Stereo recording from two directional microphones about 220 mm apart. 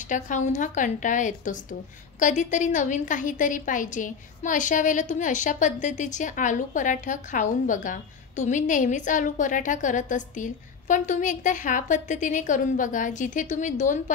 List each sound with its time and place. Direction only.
0.1 s a woman's voice: 35° left (ahead or behind)